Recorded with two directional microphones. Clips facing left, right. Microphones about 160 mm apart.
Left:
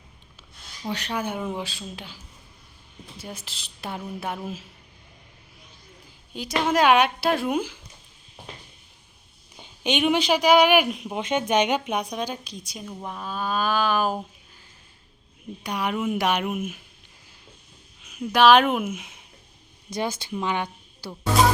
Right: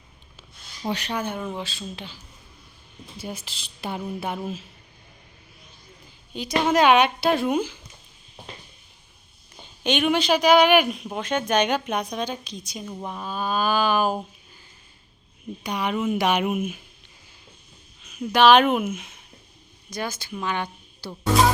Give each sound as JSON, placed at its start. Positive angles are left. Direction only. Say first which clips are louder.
{"t": 1.1, "sound": "speech", "louder": "even", "side_deg": 10}
{"t": 3.2, "sound": "a woman's voice", "louder": "right 4 dB", "side_deg": 0}
{"t": 6.3, "sound": "a woman's voice", "louder": "right 2 dB", "side_deg": 5}
{"t": 9.8, "sound": "speech", "louder": "even", "side_deg": 15}
{"t": 15.6, "sound": "a woman's voice", "louder": "right 1 dB", "side_deg": 5}
{"t": 18.0, "sound": "speech", "louder": "even", "side_deg": 5}
{"t": 19.9, "sound": "speech", "louder": "left 3 dB", "side_deg": 25}